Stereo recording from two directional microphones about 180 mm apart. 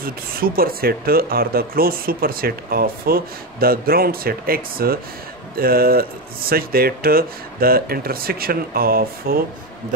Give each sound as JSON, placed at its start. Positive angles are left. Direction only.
{"t": 0.0, "sound": "speech", "side_deg": -55}